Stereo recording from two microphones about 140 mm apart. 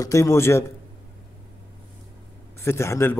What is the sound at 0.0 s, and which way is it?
Speech, 20° left (ahead or behind).